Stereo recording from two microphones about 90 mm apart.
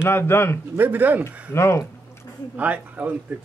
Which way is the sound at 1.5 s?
30° left (ahead or behind).